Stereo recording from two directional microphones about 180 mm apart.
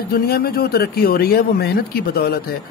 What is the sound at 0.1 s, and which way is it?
Speech, 55° left (ahead or behind).